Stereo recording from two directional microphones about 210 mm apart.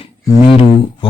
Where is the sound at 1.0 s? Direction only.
25° left (ahead or behind).